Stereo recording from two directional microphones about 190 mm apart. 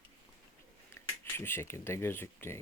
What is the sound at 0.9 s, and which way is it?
Speech, 10° left (ahead or behind).